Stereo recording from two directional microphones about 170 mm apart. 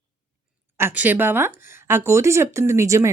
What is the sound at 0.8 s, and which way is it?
A woman's voice, 10° right (ahead or behind).